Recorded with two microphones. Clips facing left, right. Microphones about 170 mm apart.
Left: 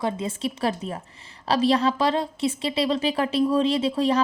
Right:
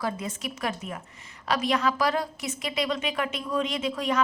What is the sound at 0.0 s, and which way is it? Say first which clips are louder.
A woman's voice: left 5 dB; 25° left (ahead or behind).